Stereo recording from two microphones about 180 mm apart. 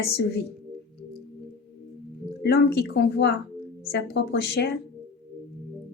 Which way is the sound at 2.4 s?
65° left (ahead or behind).